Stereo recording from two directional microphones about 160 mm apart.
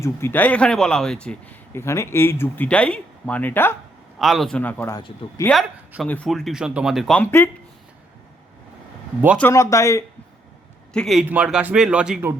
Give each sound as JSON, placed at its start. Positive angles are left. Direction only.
{"t": 0.0, "sound": "speech", "side_deg": 15}
{"t": 4.2, "sound": "a man's voice", "side_deg": 0}
{"t": 5.2, "sound": "speech", "side_deg": 35}
{"t": 6.1, "sound": "a man's voice", "side_deg": 5}
{"t": 7.2, "sound": "speech", "side_deg": 15}
{"t": 9.4, "sound": "speech", "side_deg": 20}
{"t": 10.9, "sound": "a man's voice", "side_deg": 0}